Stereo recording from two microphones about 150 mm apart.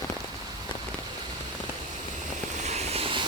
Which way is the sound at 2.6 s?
45° right (ahead or behind).